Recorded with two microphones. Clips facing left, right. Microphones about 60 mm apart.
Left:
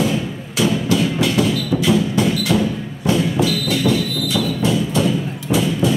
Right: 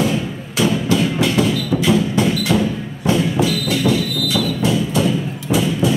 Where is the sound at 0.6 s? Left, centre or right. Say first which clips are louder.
Right 1 dB; right.